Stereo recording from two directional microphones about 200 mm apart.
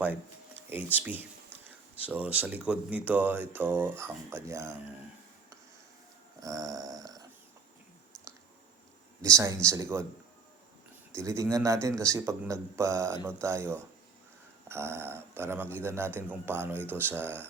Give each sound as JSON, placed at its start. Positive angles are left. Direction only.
{"t": 0.0, "sound": "speech", "side_deg": -10}
{"t": 6.4, "sound": "dog", "side_deg": -15}
{"t": 9.2, "sound": "speech", "side_deg": -15}
{"t": 11.1, "sound": "speech", "side_deg": -15}